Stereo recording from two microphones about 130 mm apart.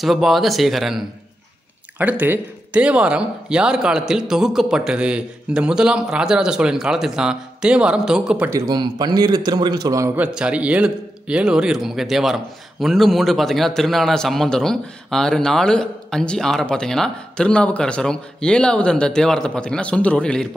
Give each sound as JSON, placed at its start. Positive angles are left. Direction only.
{"t": 0.0, "sound": "a man's voice", "side_deg": 0}
{"t": 2.0, "sound": "speech", "side_deg": -15}
{"t": 8.5, "sound": "a man's voice", "side_deg": -25}
{"t": 10.1, "sound": "a man's voice", "side_deg": -10}